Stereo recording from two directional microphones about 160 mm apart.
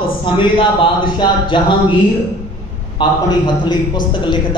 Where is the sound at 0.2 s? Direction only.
30° left (ahead or behind).